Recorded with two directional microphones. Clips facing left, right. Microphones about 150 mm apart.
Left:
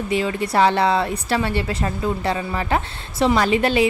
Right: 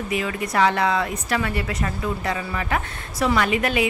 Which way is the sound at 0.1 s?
30° left (ahead or behind).